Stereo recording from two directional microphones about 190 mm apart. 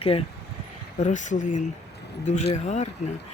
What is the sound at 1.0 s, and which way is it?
Speech, 40° left (ahead or behind).